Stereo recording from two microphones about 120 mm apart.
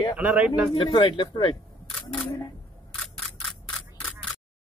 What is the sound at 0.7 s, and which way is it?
Speech, 45° left (ahead or behind).